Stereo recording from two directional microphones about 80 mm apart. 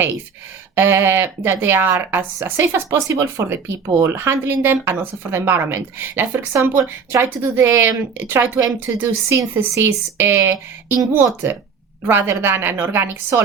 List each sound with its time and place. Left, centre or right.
0.8 s speech: right
12.0 s speech: right